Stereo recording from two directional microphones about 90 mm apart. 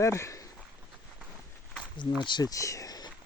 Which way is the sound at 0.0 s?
35° left (ahead or behind).